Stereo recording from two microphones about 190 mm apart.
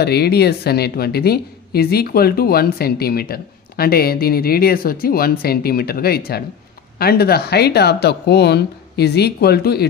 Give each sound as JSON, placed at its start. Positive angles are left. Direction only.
{"t": 0.0, "sound": "a woman's voice", "side_deg": 60}